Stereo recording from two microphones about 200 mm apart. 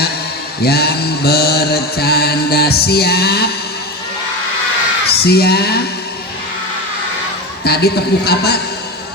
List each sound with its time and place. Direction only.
0.6 s mantra: 50° left (ahead or behind)
5.0 s speech: 50° left (ahead or behind)
7.6 s mantra: 50° left (ahead or behind)